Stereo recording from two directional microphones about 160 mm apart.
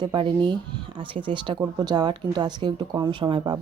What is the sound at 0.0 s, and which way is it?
Speech, 30° right (ahead or behind).